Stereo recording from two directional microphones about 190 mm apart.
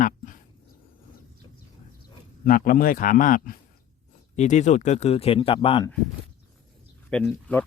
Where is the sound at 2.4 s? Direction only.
50° left (ahead or behind); by 5.8 s 30° left (ahead or behind).